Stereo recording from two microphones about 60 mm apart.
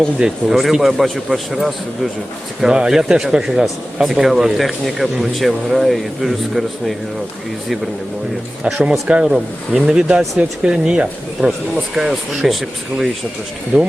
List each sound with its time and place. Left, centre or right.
0.4 s a man's voice: centre
8.6 s speech: centre
9.2 s a man's voice: centre
13.7 s speech: right